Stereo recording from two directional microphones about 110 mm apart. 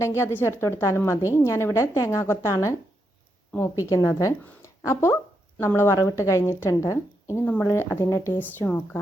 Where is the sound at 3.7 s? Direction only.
30° left (ahead or behind).